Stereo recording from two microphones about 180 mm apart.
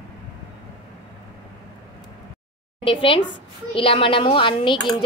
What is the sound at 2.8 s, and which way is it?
A child's voice, 30° left (ahead or behind).